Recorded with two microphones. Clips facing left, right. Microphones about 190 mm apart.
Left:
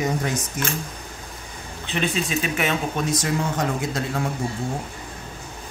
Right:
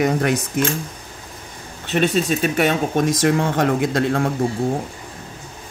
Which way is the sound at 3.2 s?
60° right (ahead or behind).